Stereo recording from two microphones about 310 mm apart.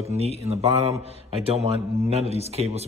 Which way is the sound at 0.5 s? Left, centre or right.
Centre.